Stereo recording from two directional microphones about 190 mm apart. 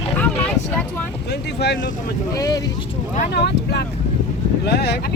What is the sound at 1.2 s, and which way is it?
Speech, 60° left (ahead or behind).